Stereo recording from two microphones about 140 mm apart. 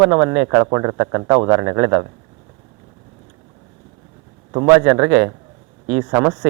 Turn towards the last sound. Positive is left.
turn(degrees=-15)  # may be behind; listen again after turning